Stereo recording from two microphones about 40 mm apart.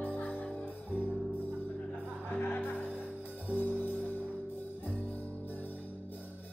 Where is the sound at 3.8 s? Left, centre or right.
Left.